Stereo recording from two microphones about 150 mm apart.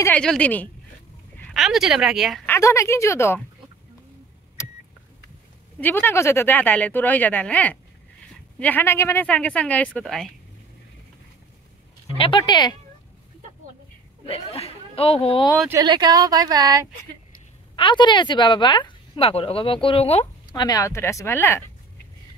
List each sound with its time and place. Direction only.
0.0 s speech: 5° left (ahead or behind)
1.5 s speech: centre (ahead or behind)
2.4 s speech: 20° left (ahead or behind)
4.6 s vehicle: 20° left (ahead or behind)
5.8 s speech: 15° left (ahead or behind)
12.2 s speech: 30° left (ahead or behind)
14.2 s speech: 40° left (ahead or behind)
15.7 s speech: 30° right (ahead or behind)
17.7 s speech: 30° left (ahead or behind)
20.5 s speech: 25° left (ahead or behind)